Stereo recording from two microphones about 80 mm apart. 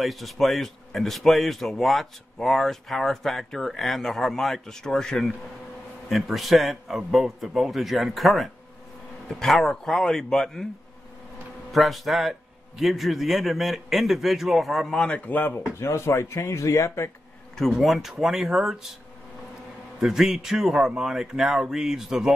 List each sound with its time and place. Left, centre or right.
0.0 s a man's voice: centre
11.7 s a man's voice: centre; by 15.6 s left
15.8 s speech: left
17.6 s a man's voice: centre
20.0 s a man's voice: centre